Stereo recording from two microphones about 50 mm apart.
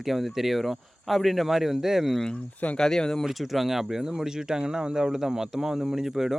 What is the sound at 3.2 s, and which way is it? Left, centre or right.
Speech, centre.